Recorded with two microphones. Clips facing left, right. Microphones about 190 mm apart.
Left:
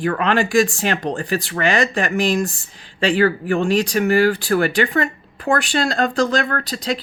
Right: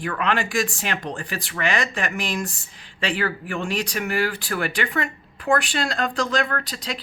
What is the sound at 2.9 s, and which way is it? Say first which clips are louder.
Speech: left 9 dB; 35° left (ahead or behind).